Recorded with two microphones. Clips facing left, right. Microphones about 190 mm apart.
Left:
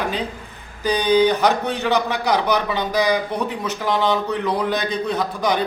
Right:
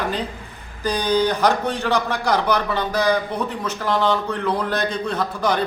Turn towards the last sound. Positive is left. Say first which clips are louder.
# left 1 dB
turn(degrees=10)  # may be behind; listen again after turning